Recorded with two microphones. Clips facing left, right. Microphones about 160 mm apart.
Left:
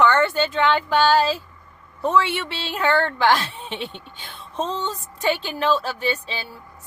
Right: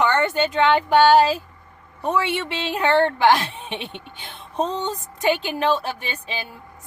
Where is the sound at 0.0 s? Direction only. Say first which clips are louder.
Left 1 dB; 15° right (ahead or behind).